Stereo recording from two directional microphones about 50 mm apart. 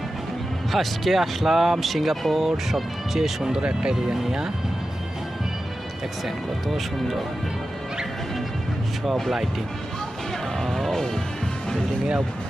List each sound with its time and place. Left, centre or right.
0.7 s speech: centre
3.6 s speech: right
3.9 s speech: centre
6.2 s speech: centre
10.6 s music: centre